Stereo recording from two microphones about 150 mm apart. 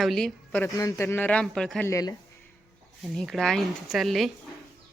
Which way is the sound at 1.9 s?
25° left (ahead or behind).